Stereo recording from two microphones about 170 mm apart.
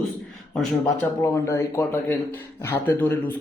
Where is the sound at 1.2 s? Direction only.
15° left (ahead or behind).